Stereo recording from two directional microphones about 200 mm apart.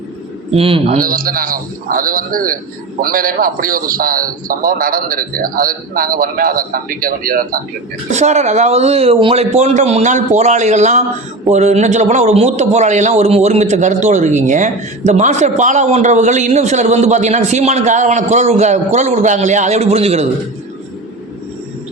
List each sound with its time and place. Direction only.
0.5 s speech: 30° right (ahead or behind)
1.0 s a man's voice: 45° right (ahead or behind)
8.1 s a man's voice: 35° right (ahead or behind)